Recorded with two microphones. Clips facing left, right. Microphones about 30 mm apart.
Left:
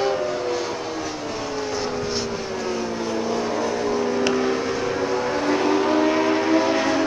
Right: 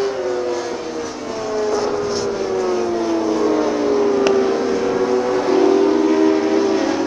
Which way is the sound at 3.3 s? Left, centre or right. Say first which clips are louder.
Right 8 dB; centre.